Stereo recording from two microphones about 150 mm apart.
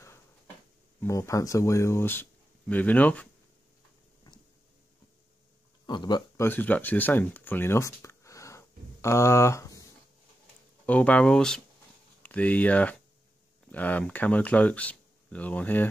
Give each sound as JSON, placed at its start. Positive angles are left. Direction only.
{"t": 1.0, "sound": "speech", "side_deg": 20}
{"t": 4.2, "sound": "a sound", "side_deg": 25}
{"t": 5.9, "sound": "speech", "side_deg": 30}
{"t": 6.4, "sound": "speech", "side_deg": 15}
{"t": 10.9, "sound": "speech", "side_deg": 10}